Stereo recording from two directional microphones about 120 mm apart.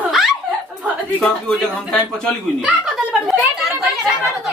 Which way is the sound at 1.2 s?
10° left (ahead or behind).